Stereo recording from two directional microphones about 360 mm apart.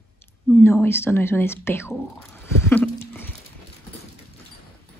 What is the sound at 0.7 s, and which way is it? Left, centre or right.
Speech, centre.